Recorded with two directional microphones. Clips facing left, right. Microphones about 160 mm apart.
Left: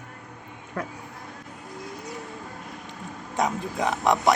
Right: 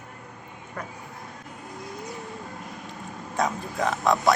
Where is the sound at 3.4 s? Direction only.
20° left (ahead or behind).